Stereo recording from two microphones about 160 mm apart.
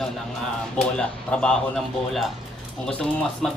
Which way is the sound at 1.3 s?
5° left (ahead or behind).